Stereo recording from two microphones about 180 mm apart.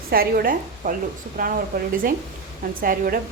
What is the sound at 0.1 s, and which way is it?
A woman's voice, 55° right (ahead or behind).